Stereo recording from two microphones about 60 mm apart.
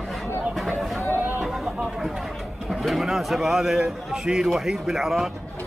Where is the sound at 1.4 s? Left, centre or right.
Centre.